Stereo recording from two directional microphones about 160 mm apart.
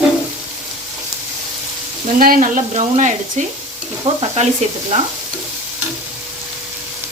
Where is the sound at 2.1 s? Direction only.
60° right (ahead or behind); by 4.4 s 35° right (ahead or behind).